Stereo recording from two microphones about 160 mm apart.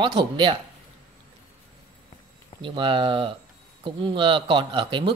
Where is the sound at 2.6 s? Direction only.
30° right (ahead or behind).